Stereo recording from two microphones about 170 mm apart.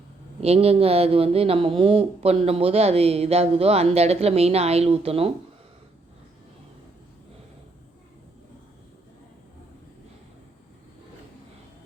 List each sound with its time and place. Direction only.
0.4 s speech: 35° right (ahead or behind)